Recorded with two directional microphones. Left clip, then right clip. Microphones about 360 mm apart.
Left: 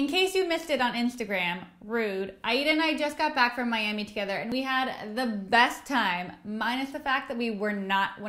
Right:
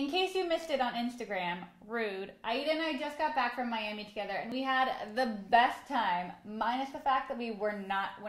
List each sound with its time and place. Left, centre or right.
0.1 s a woman's voice: left
5.5 s a woman's voice: left
7.3 s a woman's voice: left